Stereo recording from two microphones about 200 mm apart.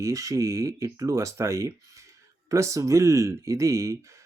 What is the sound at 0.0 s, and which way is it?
Speech, 15° right (ahead or behind).